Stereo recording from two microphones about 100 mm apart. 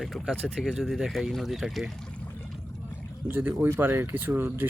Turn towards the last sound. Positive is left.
turn(degrees=-20)  # may be behind; listen again after turning